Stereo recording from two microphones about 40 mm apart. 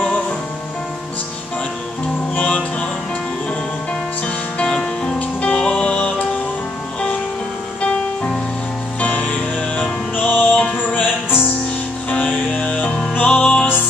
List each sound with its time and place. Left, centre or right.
4.6 s music: centre
7.8 s music: left
12.5 s music: left